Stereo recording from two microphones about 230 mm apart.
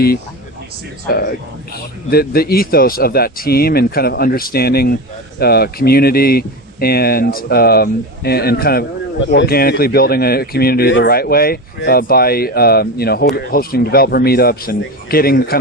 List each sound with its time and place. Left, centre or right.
1.0 s speech: left